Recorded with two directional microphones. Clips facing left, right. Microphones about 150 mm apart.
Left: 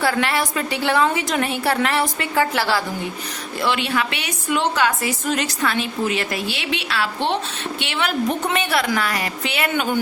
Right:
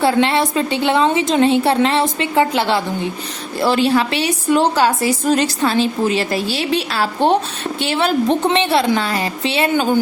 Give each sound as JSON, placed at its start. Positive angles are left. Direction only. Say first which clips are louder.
{"t": 0.0, "sound": "a woman's voice", "louder": "right 6 dB", "side_deg": -25}
{"t": 3.6, "sound": "a woman's voice", "louder": "right 7 dB", "side_deg": -35}